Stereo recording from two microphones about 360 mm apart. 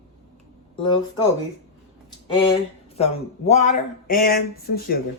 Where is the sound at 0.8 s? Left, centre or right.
Centre.